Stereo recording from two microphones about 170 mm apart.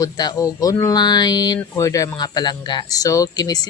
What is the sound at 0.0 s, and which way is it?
Speech, 20° left (ahead or behind).